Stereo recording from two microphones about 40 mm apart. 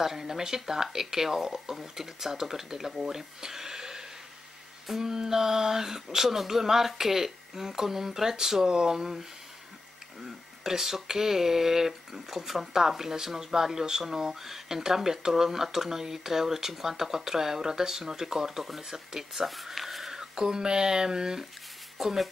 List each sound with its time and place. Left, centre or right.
0.0 s speech: centre
10.2 s speech: centre
20.1 s speech: centre
21.9 s speech: centre